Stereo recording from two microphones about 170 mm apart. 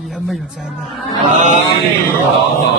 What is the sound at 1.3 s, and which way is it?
Chant, 45° right (ahead or behind).